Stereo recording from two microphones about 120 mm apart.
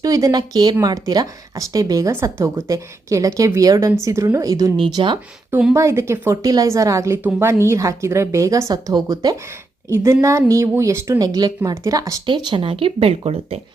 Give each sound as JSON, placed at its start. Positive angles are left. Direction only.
{"t": 0.0, "sound": "speech", "side_deg": -30}
{"t": 5.5, "sound": "speech", "side_deg": -10}
{"t": 5.7, "sound": "speech", "side_deg": -25}
{"t": 12.2, "sound": "speech", "side_deg": -45}